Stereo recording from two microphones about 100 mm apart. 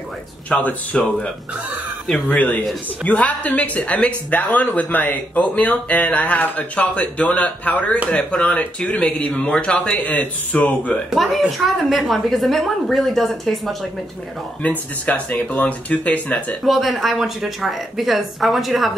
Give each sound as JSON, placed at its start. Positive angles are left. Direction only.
{"t": 0.5, "sound": "speech", "side_deg": 15}
{"t": 11.1, "sound": "a woman's voice", "side_deg": 0}
{"t": 14.6, "sound": "speech", "side_deg": 15}
{"t": 16.6, "sound": "a woman's voice", "side_deg": 0}